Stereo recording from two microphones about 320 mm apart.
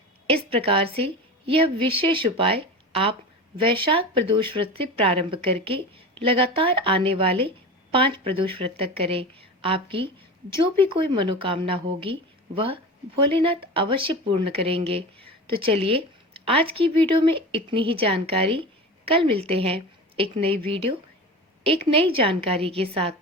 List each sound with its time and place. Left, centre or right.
0.5 s a woman's voice: centre
21.6 s a woman's voice: centre